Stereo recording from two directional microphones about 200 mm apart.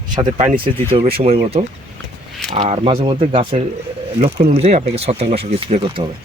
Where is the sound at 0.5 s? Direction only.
25° right (ahead or behind).